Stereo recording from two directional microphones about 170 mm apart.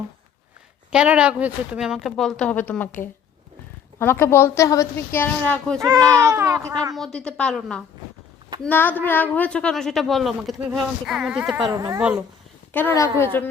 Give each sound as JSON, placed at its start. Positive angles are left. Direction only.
{"t": 0.9, "sound": "a woman's voice", "side_deg": -5}
{"t": 6.1, "sound": "speech", "side_deg": -15}
{"t": 6.9, "sound": "a woman's voice", "side_deg": 5}
{"t": 12.7, "sound": "a woman's voice", "side_deg": 15}